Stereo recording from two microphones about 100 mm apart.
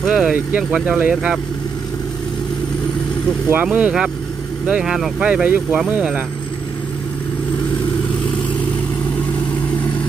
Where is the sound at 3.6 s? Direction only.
10° right (ahead or behind).